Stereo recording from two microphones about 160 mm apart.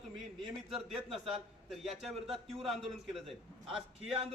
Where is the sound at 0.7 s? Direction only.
Centre (ahead or behind).